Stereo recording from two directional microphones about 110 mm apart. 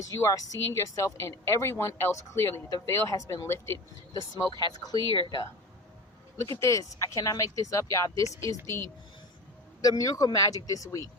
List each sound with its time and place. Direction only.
0.1 s speech: 25° left (ahead or behind)
5.1 s speech: 45° left (ahead or behind)
6.4 s speech: 25° left (ahead or behind)